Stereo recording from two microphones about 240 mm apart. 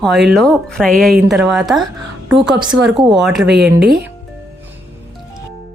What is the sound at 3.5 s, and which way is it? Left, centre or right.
Speech, right.